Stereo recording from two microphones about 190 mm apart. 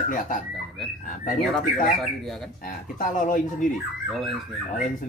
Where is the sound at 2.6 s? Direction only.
45° left (ahead or behind).